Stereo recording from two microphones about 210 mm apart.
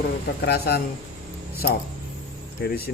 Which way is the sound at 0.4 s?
50° left (ahead or behind).